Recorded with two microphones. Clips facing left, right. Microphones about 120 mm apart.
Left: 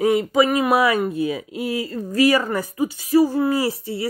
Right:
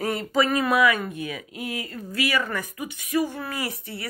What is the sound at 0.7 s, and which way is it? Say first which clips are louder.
Speech: left 4 dB; 35° left (ahead or behind).